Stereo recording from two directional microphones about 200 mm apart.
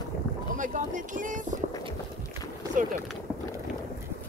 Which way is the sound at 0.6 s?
40° right (ahead or behind).